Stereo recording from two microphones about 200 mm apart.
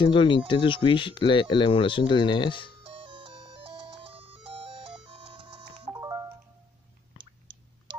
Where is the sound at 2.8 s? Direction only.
25° right (ahead or behind).